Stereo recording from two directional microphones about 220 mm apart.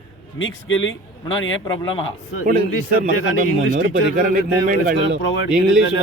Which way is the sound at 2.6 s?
40° right (ahead or behind).